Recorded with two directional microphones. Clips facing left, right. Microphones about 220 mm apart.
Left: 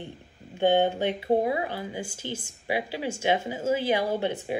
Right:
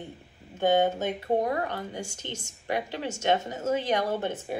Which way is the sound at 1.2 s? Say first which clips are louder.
Left 2 dB; 10° left (ahead or behind).